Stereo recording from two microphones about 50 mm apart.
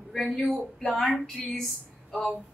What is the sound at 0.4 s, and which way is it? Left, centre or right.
A woman's voice, centre.